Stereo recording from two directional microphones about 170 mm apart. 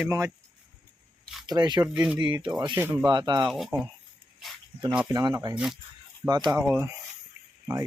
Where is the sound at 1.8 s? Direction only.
10° right (ahead or behind).